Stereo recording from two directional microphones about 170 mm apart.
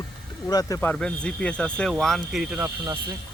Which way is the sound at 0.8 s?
10° left (ahead or behind).